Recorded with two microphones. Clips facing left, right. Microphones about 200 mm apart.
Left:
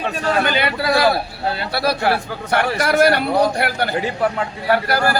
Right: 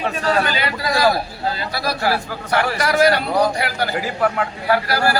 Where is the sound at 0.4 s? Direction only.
60° left (ahead or behind).